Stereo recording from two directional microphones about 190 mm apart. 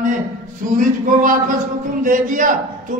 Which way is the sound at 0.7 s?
45° right (ahead or behind).